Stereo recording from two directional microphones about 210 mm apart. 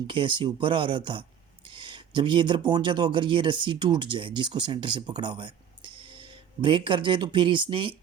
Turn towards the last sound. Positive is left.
turn(degrees=-25)  # may be behind; listen again after turning